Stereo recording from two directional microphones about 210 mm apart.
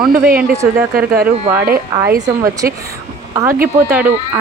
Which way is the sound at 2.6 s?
50° right (ahead or behind).